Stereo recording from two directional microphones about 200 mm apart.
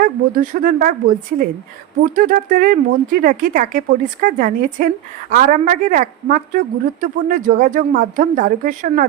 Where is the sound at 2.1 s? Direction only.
45° right (ahead or behind).